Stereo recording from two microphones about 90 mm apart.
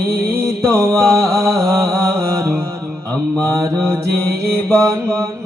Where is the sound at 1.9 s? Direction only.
30° right (ahead or behind).